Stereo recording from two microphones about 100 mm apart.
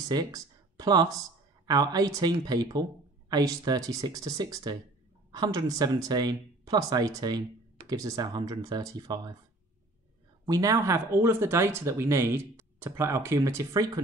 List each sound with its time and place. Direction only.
0.1 s speech: 40° right (ahead or behind)
10.4 s speech: 35° right (ahead or behind)